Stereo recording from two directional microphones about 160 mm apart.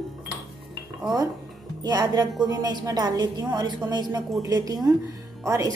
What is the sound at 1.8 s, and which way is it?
Speech, 25° right (ahead or behind).